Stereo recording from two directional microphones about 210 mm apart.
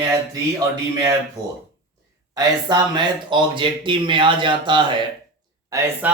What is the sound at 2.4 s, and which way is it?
Speech, 20° right (ahead or behind).